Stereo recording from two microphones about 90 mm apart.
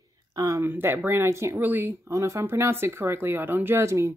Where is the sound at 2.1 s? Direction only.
35° right (ahead or behind).